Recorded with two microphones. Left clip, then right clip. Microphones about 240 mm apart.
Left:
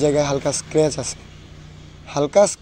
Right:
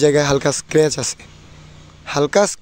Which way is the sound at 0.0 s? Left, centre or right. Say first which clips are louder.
Right 4 dB; right.